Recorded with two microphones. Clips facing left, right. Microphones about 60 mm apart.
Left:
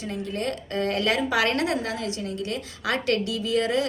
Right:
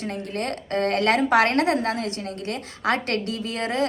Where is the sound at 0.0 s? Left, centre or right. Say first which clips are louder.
Right 1 dB; right.